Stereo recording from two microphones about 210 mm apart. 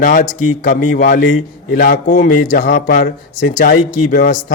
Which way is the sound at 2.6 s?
55° left (ahead or behind).